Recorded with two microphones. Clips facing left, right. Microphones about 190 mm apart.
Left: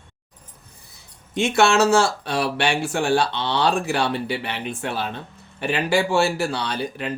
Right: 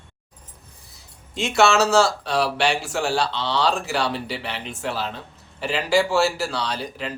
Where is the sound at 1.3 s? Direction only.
55° left (ahead or behind).